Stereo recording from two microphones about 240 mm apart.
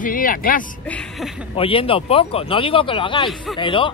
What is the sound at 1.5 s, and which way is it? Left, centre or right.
Speech, left.